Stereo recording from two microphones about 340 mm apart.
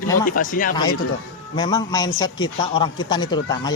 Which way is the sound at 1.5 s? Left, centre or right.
Centre.